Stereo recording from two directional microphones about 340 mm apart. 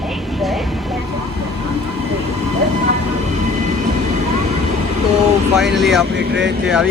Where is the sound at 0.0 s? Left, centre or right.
Centre.